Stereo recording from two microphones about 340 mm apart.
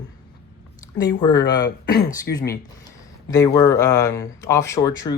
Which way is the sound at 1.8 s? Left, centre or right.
Left.